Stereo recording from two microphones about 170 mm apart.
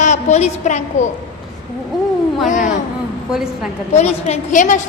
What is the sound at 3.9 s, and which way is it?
Speech, 40° left (ahead or behind).